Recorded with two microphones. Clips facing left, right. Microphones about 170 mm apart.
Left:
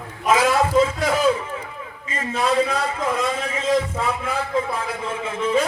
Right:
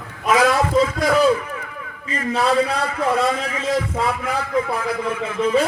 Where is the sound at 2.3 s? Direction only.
35° right (ahead or behind).